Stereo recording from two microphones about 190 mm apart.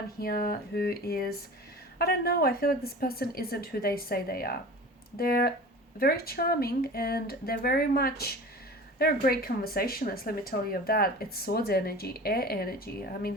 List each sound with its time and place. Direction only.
0.2 s speech: 50° left (ahead or behind)